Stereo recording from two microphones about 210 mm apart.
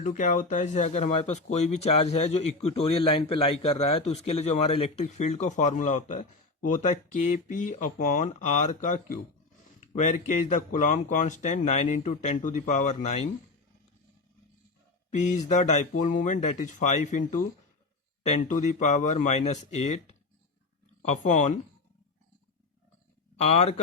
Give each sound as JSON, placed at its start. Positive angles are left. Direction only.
{"t": 0.0, "sound": "speech", "side_deg": 35}
{"t": 15.1, "sound": "speech", "side_deg": 35}
{"t": 18.3, "sound": "speech", "side_deg": 35}
{"t": 23.4, "sound": "speech", "side_deg": 30}